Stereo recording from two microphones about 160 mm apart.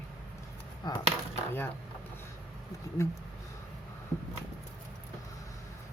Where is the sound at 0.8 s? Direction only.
25° left (ahead or behind).